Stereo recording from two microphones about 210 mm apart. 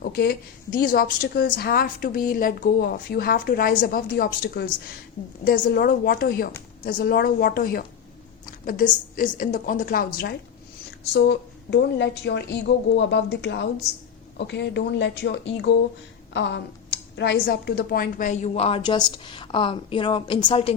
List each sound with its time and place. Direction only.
0.0 s a woman's voice: 45° left (ahead or behind)
11.1 s a woman's voice: 55° left (ahead or behind); by 20.7 s 25° left (ahead or behind)